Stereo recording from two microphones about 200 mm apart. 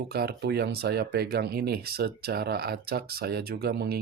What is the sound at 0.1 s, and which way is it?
Speech, 50° right (ahead or behind).